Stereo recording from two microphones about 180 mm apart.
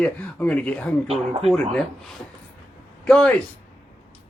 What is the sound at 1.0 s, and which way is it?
Speech, 35° right (ahead or behind).